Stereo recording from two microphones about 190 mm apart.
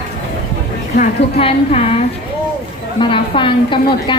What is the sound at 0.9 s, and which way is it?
A woman's voice, 30° left (ahead or behind).